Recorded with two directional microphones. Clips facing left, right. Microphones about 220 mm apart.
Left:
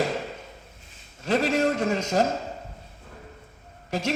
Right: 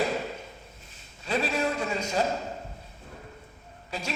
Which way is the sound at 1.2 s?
45° left (ahead or behind).